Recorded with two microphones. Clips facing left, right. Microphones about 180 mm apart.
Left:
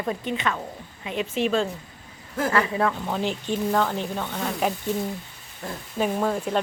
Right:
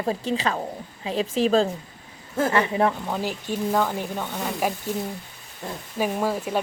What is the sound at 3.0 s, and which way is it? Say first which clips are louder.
Speech: left 1 dB; 5° right (ahead or behind).